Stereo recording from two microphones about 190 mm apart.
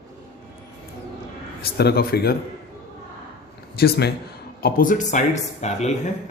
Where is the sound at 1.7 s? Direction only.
55° left (ahead or behind).